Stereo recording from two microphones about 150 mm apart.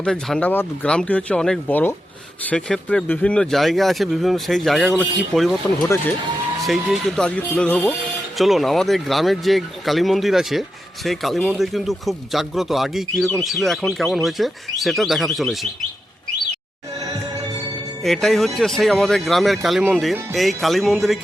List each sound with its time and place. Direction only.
0.0 s speech: 5° left (ahead or behind)
6.6 s speech: centre (ahead or behind)
18.0 s speech: centre (ahead or behind)